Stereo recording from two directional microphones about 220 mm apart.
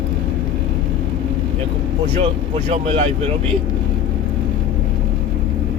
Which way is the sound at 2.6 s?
25° right (ahead or behind).